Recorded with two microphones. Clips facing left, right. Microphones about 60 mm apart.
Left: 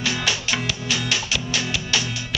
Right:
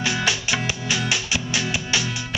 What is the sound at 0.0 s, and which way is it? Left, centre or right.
Music, centre.